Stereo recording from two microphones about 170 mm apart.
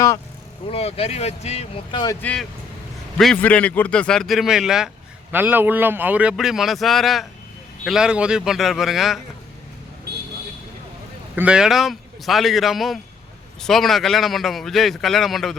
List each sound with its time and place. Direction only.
0.7 s speech: 35° left (ahead or behind)
2.2 s a man's voice: 5° left (ahead or behind)
10.1 s vehicle: 70° right (ahead or behind)
11.3 s a man's voice: 5° right (ahead or behind)